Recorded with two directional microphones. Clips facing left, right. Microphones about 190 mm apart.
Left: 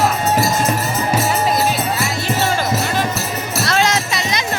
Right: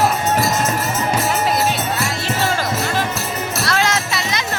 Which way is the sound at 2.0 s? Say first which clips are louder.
Left 1 dB; centre (ahead or behind).